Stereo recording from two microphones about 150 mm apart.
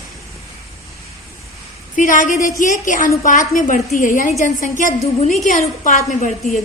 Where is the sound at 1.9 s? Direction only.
60° left (ahead or behind).